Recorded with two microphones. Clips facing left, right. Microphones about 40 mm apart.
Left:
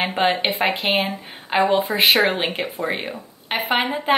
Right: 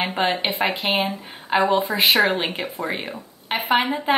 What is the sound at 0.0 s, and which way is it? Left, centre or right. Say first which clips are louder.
Speech: left 2 dB; centre.